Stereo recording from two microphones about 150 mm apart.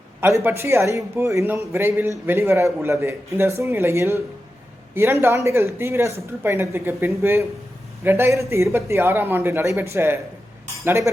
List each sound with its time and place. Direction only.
0.2 s a man's voice: 15° right (ahead or behind)
5.2 s a man's voice: 20° right (ahead or behind)